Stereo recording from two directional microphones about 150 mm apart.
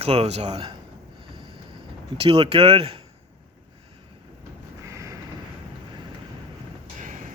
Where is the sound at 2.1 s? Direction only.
40° right (ahead or behind).